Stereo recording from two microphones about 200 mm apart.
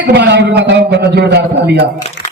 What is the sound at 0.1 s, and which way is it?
A man's voice, 55° right (ahead or behind).